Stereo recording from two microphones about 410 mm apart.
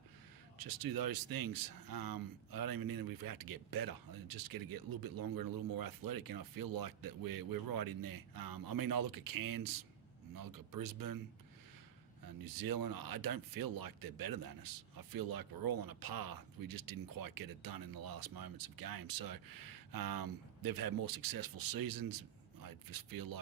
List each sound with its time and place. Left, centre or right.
0.6 s speech: right
12.2 s speech: right